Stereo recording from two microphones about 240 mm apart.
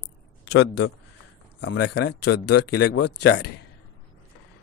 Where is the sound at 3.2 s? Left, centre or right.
Left.